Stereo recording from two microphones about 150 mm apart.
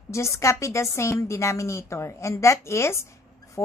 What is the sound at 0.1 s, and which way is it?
A woman's voice, 20° left (ahead or behind).